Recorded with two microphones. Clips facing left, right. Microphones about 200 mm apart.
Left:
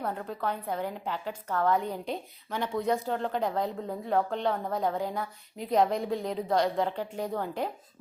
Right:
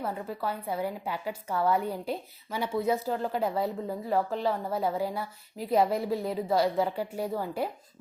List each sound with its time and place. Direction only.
0.0 s a woman's voice: 5° right (ahead or behind)